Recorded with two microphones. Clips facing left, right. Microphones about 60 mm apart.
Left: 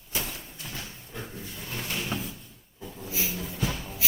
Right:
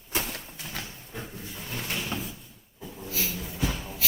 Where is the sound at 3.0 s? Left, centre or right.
Centre.